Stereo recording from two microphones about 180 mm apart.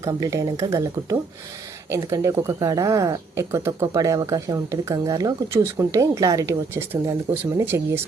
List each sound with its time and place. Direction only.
0.0 s speech: 20° right (ahead or behind)